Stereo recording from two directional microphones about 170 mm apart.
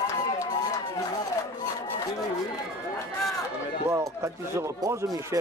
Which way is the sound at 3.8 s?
15° right (ahead or behind).